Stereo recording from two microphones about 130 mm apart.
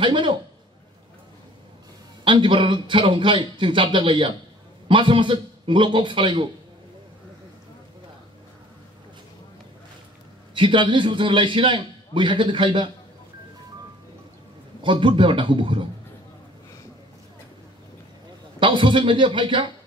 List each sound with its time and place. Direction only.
0.0 s a man's voice: 40° right (ahead or behind)
2.2 s a man's voice: 40° right (ahead or behind)
10.5 s a man's voice: 40° right (ahead or behind)
14.8 s a man's voice: 40° right (ahead or behind)
18.6 s a man's voice: 40° right (ahead or behind)